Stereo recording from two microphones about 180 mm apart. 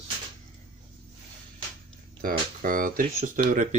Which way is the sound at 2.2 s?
50° right (ahead or behind).